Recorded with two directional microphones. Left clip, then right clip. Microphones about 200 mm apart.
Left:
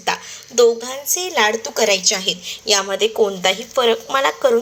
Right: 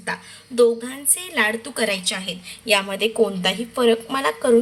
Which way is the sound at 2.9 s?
15° left (ahead or behind).